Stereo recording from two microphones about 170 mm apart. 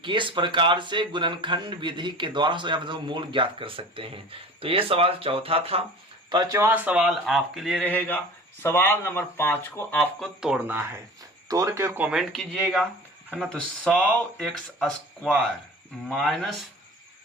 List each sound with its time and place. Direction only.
0.0 s a man's voice: 30° right (ahead or behind)
6.3 s speech: 20° right (ahead or behind); by 7.9 s centre (ahead or behind)
8.6 s speech: 15° left (ahead or behind); by 10.8 s 5° right (ahead or behind)
11.4 s speech: 20° right (ahead or behind)
12.3 s speech: centre (ahead or behind)